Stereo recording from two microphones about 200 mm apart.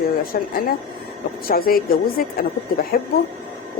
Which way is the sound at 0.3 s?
45° left (ahead or behind).